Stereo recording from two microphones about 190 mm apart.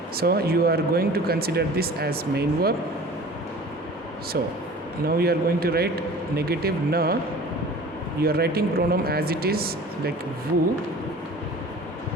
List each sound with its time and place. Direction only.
0.2 s speech: 55° right (ahead or behind)
4.4 s a man's voice: 55° right (ahead or behind)
8.2 s speech: 55° right (ahead or behind)